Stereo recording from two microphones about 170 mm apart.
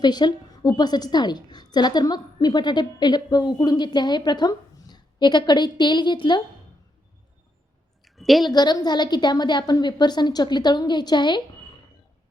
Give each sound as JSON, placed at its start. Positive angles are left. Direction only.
{"t": 0.0, "sound": "a woman's voice", "side_deg": 25}
{"t": 8.0, "sound": "a sound", "side_deg": 0}
{"t": 8.4, "sound": "a woman's voice", "side_deg": 25}